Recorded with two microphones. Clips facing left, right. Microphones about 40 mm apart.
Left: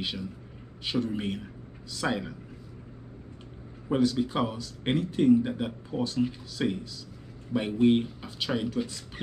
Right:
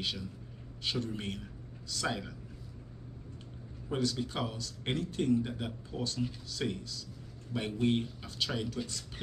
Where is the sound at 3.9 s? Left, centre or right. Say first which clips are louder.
Left 8 dB; centre.